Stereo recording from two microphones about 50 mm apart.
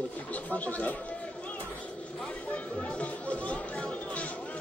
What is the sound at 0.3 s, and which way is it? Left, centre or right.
Speech, left.